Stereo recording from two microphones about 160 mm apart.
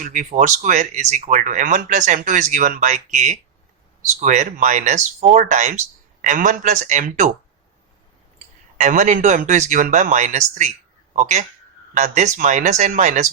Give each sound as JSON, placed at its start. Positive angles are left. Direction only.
{"t": 0.0, "sound": "speech", "side_deg": -50}
{"t": 8.8, "sound": "a man's voice", "side_deg": -50}